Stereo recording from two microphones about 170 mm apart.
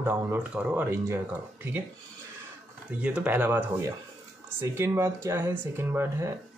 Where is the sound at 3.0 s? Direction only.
10° right (ahead or behind).